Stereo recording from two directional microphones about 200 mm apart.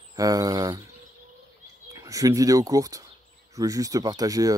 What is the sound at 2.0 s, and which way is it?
Speech, 15° right (ahead or behind).